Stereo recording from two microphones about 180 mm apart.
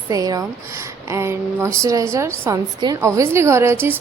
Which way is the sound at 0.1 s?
20° right (ahead or behind).